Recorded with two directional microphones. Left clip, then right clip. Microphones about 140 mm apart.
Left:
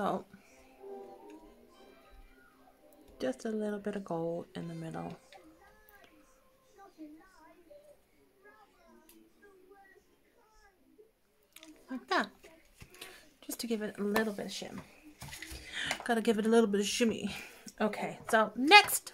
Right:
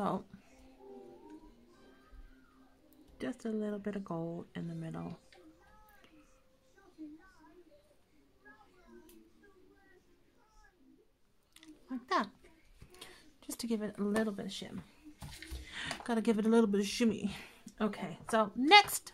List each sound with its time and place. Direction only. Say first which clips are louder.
0.0 s speech: left 2 dB; 15° right (ahead or behind)
3.2 s speech: left 4 dB; centre (ahead or behind)
11.5 s a sound: left 1 dB; 15° right (ahead or behind)
12.9 s speech: left 3 dB; 20° right (ahead or behind)
15.6 s a sound: left 5 dB; 15° right (ahead or behind)
16.0 s speech: left 2 dB; 15° right (ahead or behind)